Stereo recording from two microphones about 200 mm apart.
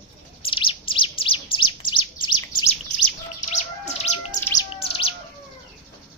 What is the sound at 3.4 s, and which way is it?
Bird, 35° left (ahead or behind).